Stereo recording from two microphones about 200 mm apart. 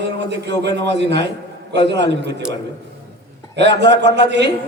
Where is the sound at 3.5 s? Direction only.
60° right (ahead or behind).